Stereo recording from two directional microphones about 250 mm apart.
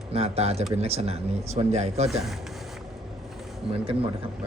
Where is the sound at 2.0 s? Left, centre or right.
Centre.